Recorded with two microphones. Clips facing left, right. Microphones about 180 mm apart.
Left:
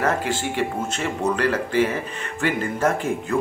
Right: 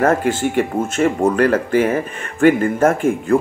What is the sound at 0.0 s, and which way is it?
Speech, 50° right (ahead or behind).